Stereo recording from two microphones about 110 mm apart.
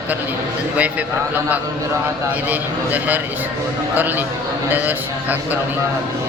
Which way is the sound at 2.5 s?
15° right (ahead or behind).